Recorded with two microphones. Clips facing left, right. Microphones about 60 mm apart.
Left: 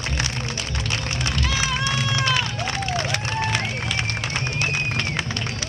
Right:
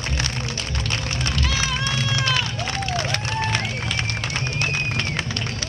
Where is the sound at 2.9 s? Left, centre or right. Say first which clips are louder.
Even; centre.